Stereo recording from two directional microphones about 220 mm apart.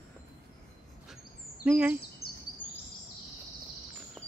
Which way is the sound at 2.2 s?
45° left (ahead or behind).